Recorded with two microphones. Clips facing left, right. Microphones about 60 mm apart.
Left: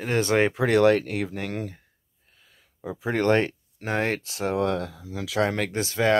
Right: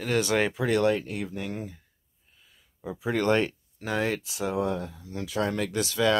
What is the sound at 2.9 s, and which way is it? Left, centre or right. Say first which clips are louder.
Speech: left 2 dB; left.